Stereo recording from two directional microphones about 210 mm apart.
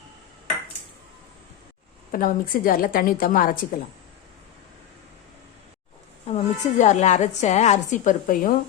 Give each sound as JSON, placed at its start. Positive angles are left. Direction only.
{"t": 2.1, "sound": "a woman's voice", "side_deg": 40}
{"t": 6.2, "sound": "a woman's voice", "side_deg": 35}